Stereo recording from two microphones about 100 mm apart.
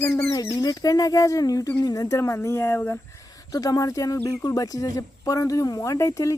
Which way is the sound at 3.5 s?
35° left (ahead or behind).